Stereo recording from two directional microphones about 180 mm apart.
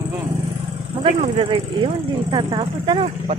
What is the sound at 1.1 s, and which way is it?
Speech, 35° right (ahead or behind).